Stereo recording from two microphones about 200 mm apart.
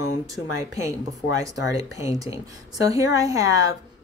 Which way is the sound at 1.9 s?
15° right (ahead or behind).